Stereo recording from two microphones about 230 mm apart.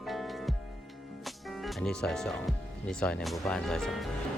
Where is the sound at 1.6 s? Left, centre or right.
Centre.